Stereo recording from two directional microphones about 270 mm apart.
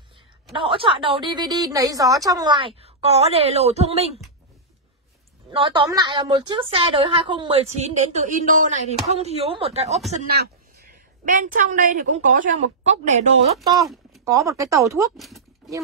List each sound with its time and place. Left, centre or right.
0.5 s a woman's voice: centre
5.5 s a woman's voice: centre
10.1 s a woman's voice: right
14.2 s speech: centre
15.1 s a sound: centre